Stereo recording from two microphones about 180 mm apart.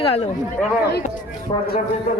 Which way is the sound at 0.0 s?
30° left (ahead or behind).